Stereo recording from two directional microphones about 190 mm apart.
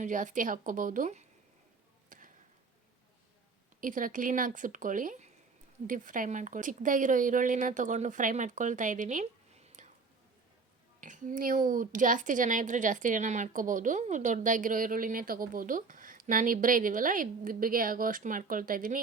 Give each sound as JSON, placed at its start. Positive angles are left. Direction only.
{"t": 0.0, "sound": "a woman's voice", "side_deg": -45}
{"t": 2.0, "sound": "a sound", "side_deg": -45}
{"t": 3.8, "sound": "a woman's voice", "side_deg": -45}
{"t": 9.8, "sound": "whispering", "side_deg": -40}
{"t": 11.0, "sound": "a woman's voice", "side_deg": -40}